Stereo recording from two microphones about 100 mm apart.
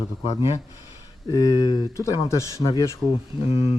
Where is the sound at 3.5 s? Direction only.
80° left.